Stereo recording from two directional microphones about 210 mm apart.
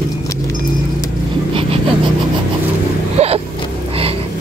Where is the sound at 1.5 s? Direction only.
25° right (ahead or behind).